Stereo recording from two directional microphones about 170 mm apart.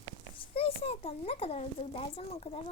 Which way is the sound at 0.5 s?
35° left (ahead or behind).